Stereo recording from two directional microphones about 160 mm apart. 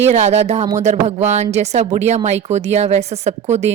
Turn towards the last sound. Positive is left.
turn(degrees=-45)  # may be behind; listen again after turning